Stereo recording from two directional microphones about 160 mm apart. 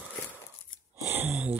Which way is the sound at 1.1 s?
5° right (ahead or behind).